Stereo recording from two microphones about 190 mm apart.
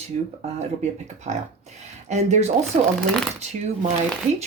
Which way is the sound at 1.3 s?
35° right (ahead or behind).